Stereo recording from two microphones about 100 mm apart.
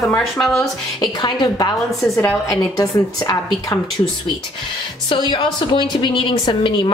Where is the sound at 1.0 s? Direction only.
45° left (ahead or behind).